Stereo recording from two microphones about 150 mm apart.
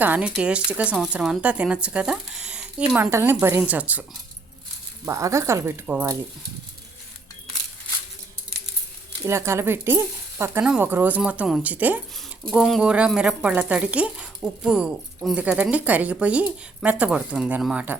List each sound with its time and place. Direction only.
0.0 s speech: 10° right (ahead or behind)
5.0 s speech: 20° right (ahead or behind)
9.2 s speech: 20° right (ahead or behind)
12.5 s speech: centre (ahead or behind)